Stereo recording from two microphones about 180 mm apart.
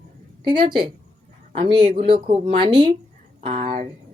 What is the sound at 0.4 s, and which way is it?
Speech, 25° right (ahead or behind).